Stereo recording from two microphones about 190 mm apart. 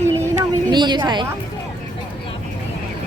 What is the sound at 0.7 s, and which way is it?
Speech, 25° right (ahead or behind).